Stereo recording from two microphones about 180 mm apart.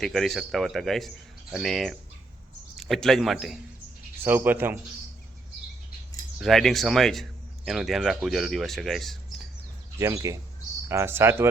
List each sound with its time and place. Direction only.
0.0 s speech: centre (ahead or behind)
4.2 s speech: 10° right (ahead or behind)
6.4 s speech: centre (ahead or behind)
10.0 s speech: 15° right (ahead or behind)